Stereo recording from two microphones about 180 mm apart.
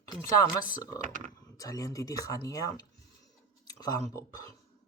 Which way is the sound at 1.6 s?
20° left (ahead or behind).